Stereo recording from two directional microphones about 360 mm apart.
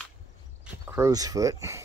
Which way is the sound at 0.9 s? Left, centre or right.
Centre.